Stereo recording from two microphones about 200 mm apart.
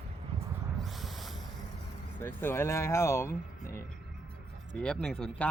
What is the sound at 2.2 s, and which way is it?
Speech, 10° left (ahead or behind).